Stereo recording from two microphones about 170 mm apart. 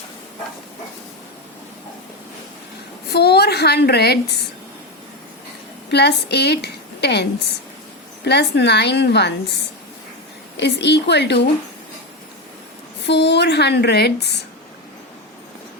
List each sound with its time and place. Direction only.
3.1 s a woman's voice: 70° left (ahead or behind)
5.9 s a woman's voice: 75° left (ahead or behind)
10.6 s speech: 80° left
13.1 s speech: 90° left